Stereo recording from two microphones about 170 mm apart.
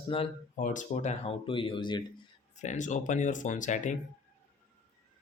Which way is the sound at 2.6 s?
45° left (ahead or behind).